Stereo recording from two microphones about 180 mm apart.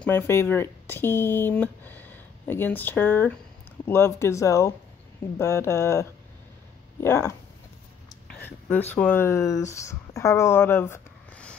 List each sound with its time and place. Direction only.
0.0 s speech: 10° left (ahead or behind)
8.3 s a sound: 10° left (ahead or behind)
8.9 s speech: 10° left (ahead or behind)